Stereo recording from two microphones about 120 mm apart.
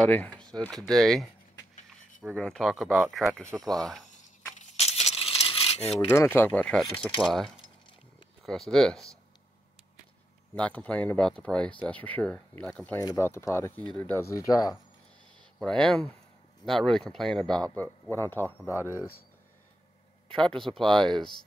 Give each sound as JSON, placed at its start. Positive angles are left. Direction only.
{"t": 0.0, "sound": "speech", "side_deg": 10}
{"t": 2.3, "sound": "speech", "side_deg": 5}
{"t": 4.6, "sound": "a sound", "side_deg": 65}
{"t": 5.9, "sound": "speech", "side_deg": 20}
{"t": 10.5, "sound": "speech", "side_deg": 10}
{"t": 14.2, "sound": "speech", "side_deg": 25}
{"t": 15.6, "sound": "speech", "side_deg": 5}
{"t": 18.1, "sound": "speech", "side_deg": 20}
{"t": 20.3, "sound": "speech", "side_deg": 5}